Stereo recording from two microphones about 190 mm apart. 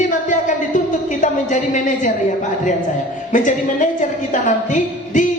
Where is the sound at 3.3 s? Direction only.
40° left (ahead or behind).